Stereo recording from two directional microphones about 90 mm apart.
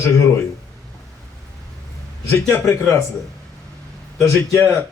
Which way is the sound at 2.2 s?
30° left (ahead or behind).